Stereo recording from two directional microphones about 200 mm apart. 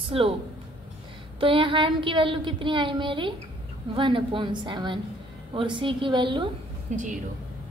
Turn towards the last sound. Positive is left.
turn(degrees=-35)  # may be behind; listen again after turning